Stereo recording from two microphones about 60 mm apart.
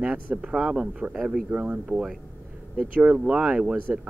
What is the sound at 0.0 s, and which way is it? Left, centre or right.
Speech, right.